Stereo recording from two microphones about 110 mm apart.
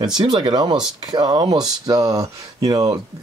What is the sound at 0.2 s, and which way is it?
Speech, 45° right (ahead or behind).